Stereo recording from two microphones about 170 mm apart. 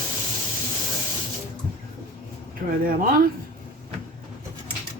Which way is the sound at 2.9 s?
60° right (ahead or behind).